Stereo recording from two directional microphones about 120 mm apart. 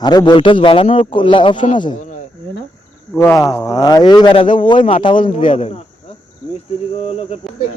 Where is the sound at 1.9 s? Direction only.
90° left.